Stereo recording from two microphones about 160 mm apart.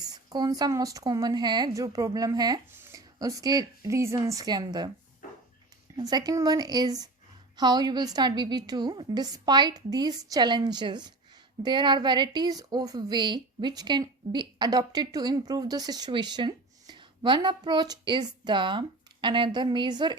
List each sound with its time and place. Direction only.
0.0 s a woman's voice: 25° right (ahead or behind)
6.0 s a woman's voice: 25° right (ahead or behind)